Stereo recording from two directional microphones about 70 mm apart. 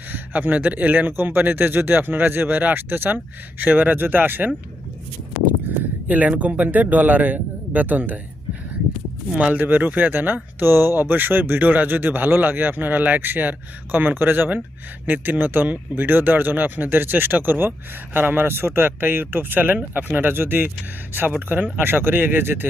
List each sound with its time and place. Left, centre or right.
0.1 s speech: right
6.1 s speech: right
9.3 s speech: right